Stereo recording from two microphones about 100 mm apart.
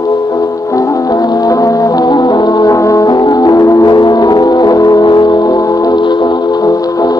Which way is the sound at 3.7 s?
40° left (ahead or behind).